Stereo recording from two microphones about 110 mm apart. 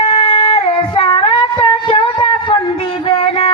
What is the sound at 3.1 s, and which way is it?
Music, 55° left (ahead or behind).